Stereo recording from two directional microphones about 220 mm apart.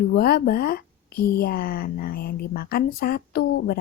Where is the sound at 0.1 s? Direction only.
45° left (ahead or behind).